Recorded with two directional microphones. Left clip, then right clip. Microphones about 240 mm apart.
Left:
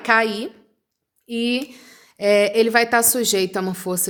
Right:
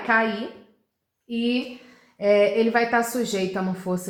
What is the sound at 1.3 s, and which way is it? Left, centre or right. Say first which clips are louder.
A woman's voice: left 3 dB; left.